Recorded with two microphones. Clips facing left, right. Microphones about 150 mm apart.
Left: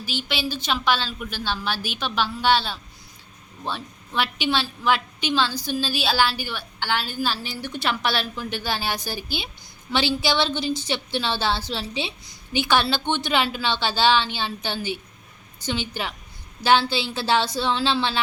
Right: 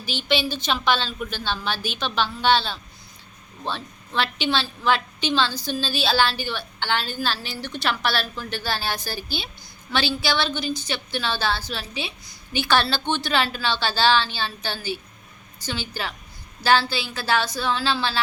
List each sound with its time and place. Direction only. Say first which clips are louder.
0.0 s a woman's voice: right 4 dB; 5° left (ahead or behind); by 18.2 s 20° left (ahead or behind)